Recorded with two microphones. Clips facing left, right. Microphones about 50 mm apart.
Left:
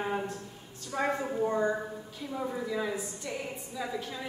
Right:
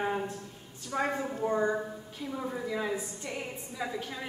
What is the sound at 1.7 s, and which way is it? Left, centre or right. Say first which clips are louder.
A woman's voice: right 1 dB; centre.